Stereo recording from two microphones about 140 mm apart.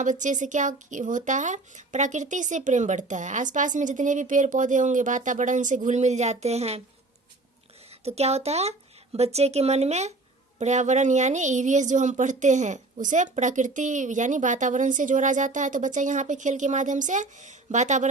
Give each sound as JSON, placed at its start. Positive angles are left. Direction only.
{"t": 0.0, "sound": "a woman's voice", "side_deg": -65}
{"t": 8.0, "sound": "a woman's voice", "side_deg": -50}